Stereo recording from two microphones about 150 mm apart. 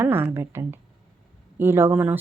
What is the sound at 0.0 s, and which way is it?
A woman's voice, 15° right (ahead or behind).